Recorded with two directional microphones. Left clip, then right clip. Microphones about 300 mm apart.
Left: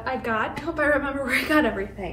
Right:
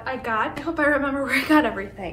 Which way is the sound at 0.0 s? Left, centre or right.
Centre.